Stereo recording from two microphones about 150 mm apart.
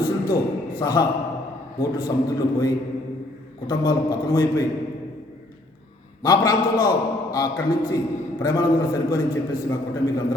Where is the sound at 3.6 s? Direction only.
30° left (ahead or behind).